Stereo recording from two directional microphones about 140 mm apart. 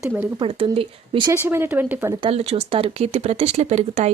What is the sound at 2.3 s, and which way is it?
Speech, 50° right (ahead or behind).